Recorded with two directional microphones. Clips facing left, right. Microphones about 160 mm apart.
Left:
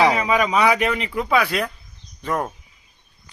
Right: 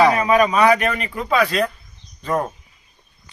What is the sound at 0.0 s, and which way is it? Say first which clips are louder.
Speech: right 3 dB; 15° left (ahead or behind).